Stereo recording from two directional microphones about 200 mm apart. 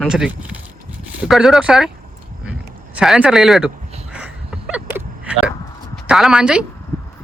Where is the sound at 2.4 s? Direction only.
5° right (ahead or behind).